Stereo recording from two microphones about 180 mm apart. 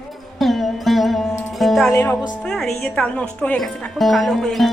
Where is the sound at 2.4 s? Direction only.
5° left (ahead or behind).